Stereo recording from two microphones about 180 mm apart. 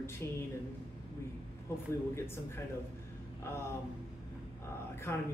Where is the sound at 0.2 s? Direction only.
15° left (ahead or behind).